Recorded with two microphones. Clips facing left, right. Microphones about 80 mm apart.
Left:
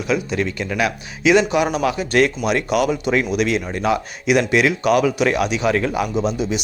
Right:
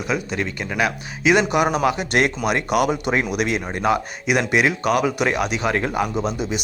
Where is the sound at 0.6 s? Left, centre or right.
Right.